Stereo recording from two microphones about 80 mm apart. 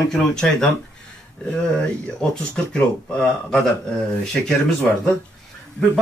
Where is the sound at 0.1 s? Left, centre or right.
Centre.